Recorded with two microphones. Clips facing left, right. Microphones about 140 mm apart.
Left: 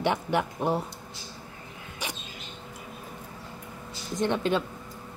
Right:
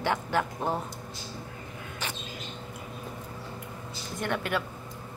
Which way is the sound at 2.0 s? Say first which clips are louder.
Left 1 dB; 15° left (ahead or behind).